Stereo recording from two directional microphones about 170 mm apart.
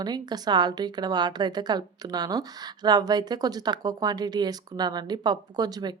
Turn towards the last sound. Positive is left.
turn(degrees=-25)  # may be behind; listen again after turning